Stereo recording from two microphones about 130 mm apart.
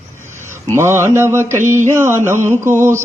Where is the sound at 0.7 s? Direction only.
20° right (ahead or behind).